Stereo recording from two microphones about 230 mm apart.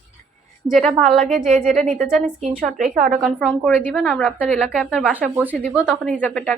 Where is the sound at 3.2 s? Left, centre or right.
Centre.